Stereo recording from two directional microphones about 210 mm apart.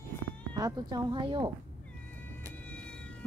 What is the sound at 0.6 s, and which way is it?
Speech, 20° right (ahead or behind).